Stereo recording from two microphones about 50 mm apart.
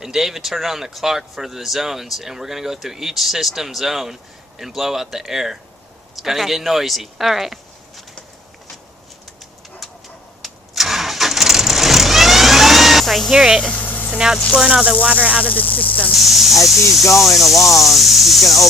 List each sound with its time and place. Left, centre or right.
0.0 s speech: centre
9.8 s chicken: centre
10.4 s vehicle: centre
13.3 s speech: centre
13.8 s a sound: left
14.5 s speech: centre
15.0 s speech: right
15.4 s speech: left
16.1 s speech: centre
17.1 s speech: left
17.3 s speech: centre